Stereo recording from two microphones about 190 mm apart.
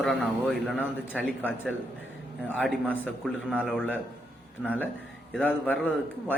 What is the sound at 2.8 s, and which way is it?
Speech, 10° left (ahead or behind).